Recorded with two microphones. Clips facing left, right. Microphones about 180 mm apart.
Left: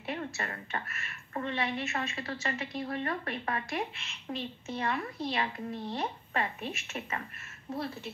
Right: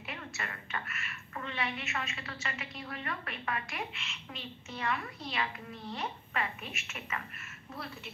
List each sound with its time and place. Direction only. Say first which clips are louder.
0.0 s a woman's voice: left 6 dB; 35° left (ahead or behind)